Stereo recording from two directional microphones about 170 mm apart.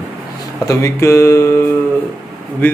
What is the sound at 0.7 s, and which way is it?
Speech, 15° left (ahead or behind).